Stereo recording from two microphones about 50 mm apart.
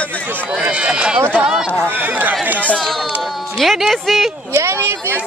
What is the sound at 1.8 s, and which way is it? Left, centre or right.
Speech, right.